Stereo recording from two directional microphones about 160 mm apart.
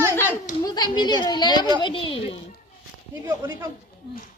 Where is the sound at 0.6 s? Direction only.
25° left (ahead or behind).